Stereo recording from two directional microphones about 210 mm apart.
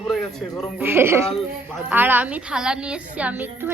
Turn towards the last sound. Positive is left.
turn(degrees=-10)  # may be behind; listen again after turning